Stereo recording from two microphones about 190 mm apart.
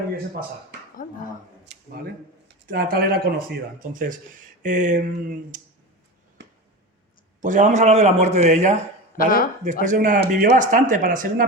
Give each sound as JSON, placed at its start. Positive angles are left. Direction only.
{"t": 1.0, "sound": "speech", "side_deg": 40}
{"t": 1.7, "sound": "a sound", "side_deg": -65}
{"t": 2.6, "sound": "speech", "side_deg": -50}
{"t": 7.4, "sound": "a man's voice", "side_deg": -40}
{"t": 9.1, "sound": "speech", "side_deg": 45}
{"t": 9.8, "sound": "speech", "side_deg": -40}
{"t": 10.2, "sound": "speech", "side_deg": -60}
{"t": 10.6, "sound": "speech", "side_deg": -40}